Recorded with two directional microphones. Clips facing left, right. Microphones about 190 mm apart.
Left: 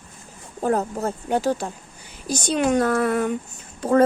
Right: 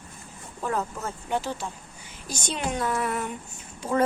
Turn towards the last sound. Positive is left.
turn(degrees=50)  # may be behind; listen again after turning